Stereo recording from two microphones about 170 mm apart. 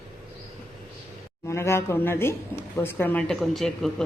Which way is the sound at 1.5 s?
15° left (ahead or behind).